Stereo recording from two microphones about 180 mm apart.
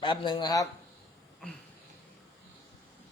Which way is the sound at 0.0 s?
25° left (ahead or behind).